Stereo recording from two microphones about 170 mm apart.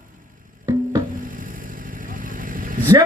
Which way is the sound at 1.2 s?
55° right (ahead or behind).